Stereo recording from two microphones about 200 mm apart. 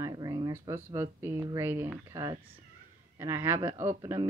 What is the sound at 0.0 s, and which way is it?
Speech, 15° right (ahead or behind).